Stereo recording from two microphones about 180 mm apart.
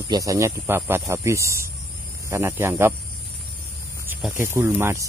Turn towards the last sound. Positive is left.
turn(degrees=-15)  # may be behind; listen again after turning